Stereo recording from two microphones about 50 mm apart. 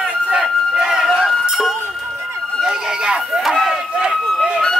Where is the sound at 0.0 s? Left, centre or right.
Centre.